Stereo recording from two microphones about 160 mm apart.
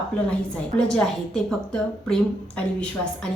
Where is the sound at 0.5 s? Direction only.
5° left (ahead or behind).